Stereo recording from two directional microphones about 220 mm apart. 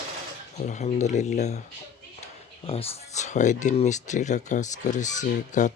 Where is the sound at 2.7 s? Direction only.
30° left (ahead or behind).